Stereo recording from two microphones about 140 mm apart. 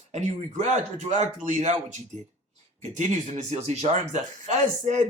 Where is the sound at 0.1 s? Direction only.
55° right (ahead or behind).